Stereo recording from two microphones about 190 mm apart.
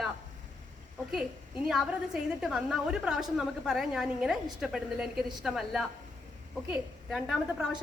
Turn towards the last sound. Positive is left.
turn(degrees=0)  # may be behind; listen again after turning